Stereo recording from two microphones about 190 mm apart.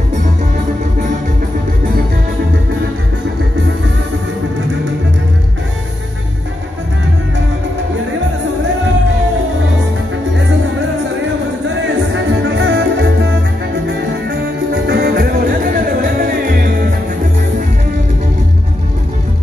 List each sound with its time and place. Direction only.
12.5 s music: 85° right
14.7 s music: 60° right (ahead or behind)